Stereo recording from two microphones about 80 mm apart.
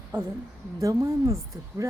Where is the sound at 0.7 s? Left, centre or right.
Right.